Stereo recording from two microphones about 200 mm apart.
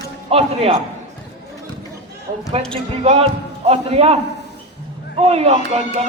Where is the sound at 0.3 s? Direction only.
30° right (ahead or behind).